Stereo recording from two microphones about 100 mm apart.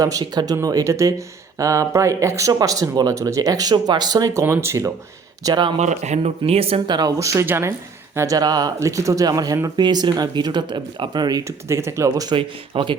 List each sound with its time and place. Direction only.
0.0 s speech: 35° right (ahead or behind)
4.4 s speech: 25° right (ahead or behind)
5.4 s speech: 45° right (ahead or behind)
6.2 s speech: 90° right; by 6.8 s 75° right (ahead or behind)
6.8 s speech: 45° right (ahead or behind)
7.2 s speech: 30° right (ahead or behind)
8.4 s speech: 40° right (ahead or behind)
12.4 s speech: 55° right (ahead or behind)